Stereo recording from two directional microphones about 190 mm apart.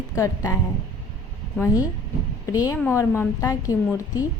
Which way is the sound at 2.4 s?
20° left (ahead or behind).